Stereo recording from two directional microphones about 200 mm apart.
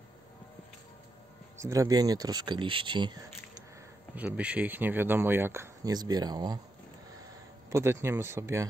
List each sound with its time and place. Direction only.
1.6 s speech: 15° right (ahead or behind)
4.1 s speech: 10° right (ahead or behind)
7.7 s speech: 15° right (ahead or behind)